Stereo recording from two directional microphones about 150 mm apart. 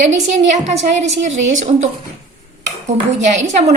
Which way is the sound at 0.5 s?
50° right (ahead or behind).